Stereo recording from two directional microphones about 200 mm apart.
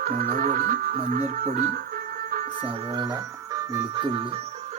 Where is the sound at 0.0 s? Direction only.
45° right (ahead or behind).